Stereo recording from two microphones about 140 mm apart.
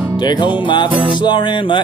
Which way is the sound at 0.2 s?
30° left (ahead or behind).